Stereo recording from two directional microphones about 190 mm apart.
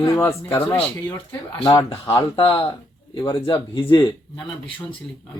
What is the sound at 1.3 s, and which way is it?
Speech, 25° left (ahead or behind).